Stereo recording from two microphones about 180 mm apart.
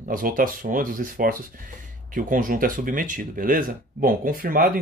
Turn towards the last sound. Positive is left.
turn(degrees=-50)  # may be behind; listen again after turning